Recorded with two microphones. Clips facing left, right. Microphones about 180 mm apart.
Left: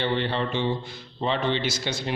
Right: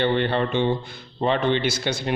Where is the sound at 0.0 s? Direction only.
55° right (ahead or behind).